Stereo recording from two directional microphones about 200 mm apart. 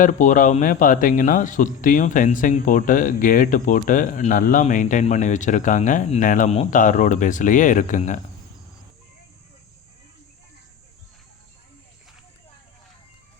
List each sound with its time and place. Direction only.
0.0 s a man's voice: 40° left (ahead or behind)